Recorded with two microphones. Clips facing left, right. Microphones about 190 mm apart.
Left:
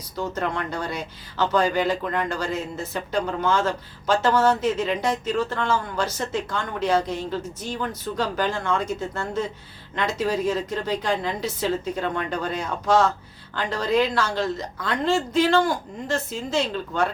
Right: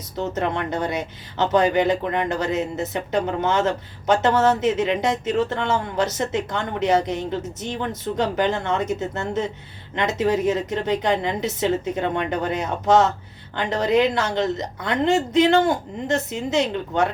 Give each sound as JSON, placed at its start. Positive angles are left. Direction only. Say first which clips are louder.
{"t": 0.2, "sound": "speech", "louder": "right 3 dB", "side_deg": -25}